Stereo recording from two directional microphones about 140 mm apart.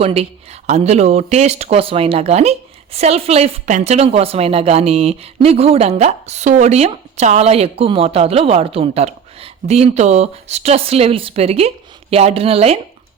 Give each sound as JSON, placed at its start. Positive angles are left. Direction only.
{"t": 0.0, "sound": "speech", "side_deg": -45}